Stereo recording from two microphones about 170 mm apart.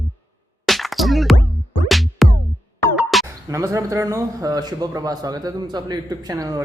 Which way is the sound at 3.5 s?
20° right (ahead or behind).